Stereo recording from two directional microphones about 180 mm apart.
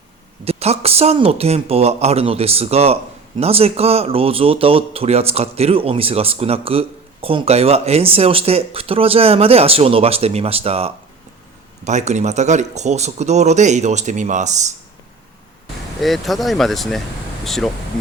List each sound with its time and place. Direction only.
0.4 s speech: 35° right (ahead or behind)
16.0 s speech: centre (ahead or behind)